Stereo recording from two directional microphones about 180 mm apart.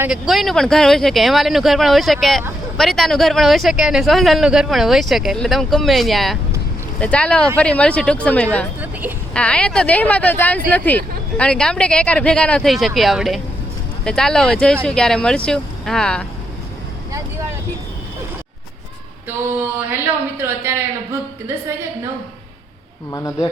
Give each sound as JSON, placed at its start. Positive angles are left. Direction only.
{"t": 0.0, "sound": "speech", "side_deg": 0}
{"t": 8.8, "sound": "vehicle", "side_deg": -10}
{"t": 9.3, "sound": "speech", "side_deg": 5}
{"t": 20.4, "sound": "speech", "side_deg": -15}
{"t": 23.1, "sound": "speech", "side_deg": 15}